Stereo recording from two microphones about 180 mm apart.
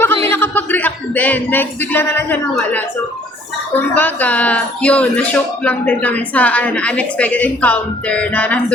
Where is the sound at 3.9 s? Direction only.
10° left (ahead or behind).